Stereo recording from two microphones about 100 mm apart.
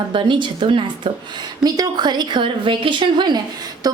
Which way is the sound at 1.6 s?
40° right (ahead or behind).